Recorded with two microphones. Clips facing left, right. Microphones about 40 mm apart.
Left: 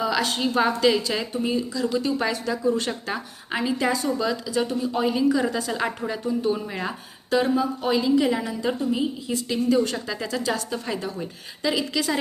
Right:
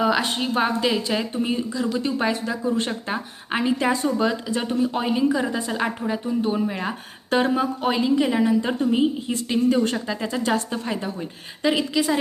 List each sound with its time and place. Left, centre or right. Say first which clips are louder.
0.0 s speech: right 2 dB; right
1.5 s speech: even; right
6.7 s a woman's voice: right 3 dB; centre
7.3 s a woman's voice: right 1 dB; right
10.1 s a woman's voice: right 3 dB; right